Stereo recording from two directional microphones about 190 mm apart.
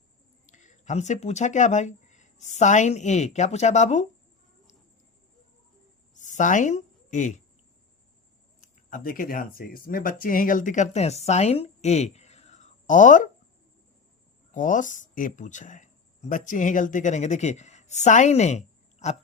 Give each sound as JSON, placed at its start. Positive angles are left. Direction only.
{"t": 0.4, "sound": "speech", "side_deg": 40}
{"t": 6.1, "sound": "a sound", "side_deg": 40}
{"t": 8.6, "sound": "speech", "side_deg": 45}
{"t": 14.5, "sound": "speech", "side_deg": 45}